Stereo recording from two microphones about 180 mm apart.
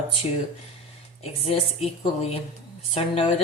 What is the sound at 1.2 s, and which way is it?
A woman's voice, 30° left (ahead or behind).